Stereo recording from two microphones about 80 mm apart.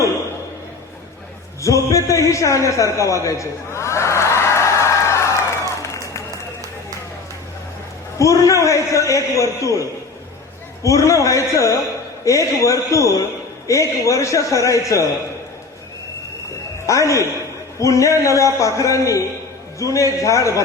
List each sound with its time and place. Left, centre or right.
1.6 s a man's voice: left
3.2 s a sound: left
8.2 s a man's voice: left
10.8 s a man's voice: left
16.8 s a man's voice: left